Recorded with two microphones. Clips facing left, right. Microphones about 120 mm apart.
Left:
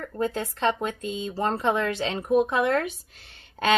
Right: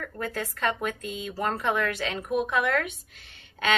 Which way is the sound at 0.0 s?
25° left (ahead or behind).